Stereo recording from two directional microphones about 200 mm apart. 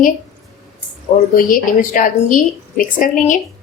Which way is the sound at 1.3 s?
45° left (ahead or behind).